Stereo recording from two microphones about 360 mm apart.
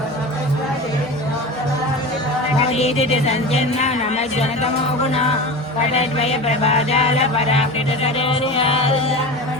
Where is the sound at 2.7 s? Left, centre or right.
Centre.